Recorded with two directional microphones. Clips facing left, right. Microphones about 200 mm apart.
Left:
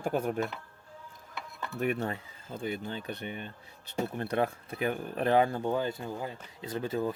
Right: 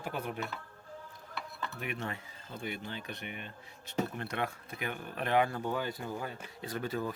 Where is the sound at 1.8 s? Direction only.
40° left (ahead or behind).